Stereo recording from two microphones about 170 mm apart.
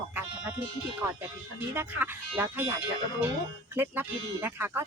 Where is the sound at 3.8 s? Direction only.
10° right (ahead or behind).